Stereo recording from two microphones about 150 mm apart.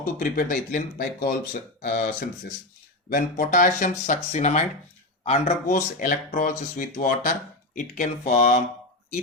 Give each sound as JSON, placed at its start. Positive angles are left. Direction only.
{"t": 0.0, "sound": "speech", "side_deg": 60}
{"t": 1.8, "sound": "speech", "side_deg": 60}